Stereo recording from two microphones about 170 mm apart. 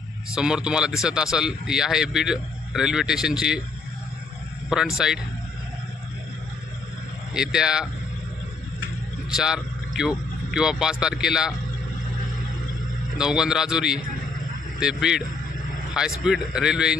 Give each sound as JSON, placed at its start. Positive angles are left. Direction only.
{"t": 0.3, "sound": "speech", "side_deg": -5}
{"t": 4.6, "sound": "speech", "side_deg": -5}
{"t": 7.3, "sound": "speech", "side_deg": -5}
{"t": 9.3, "sound": "a man's voice", "side_deg": -5}
{"t": 13.2, "sound": "speech", "side_deg": -5}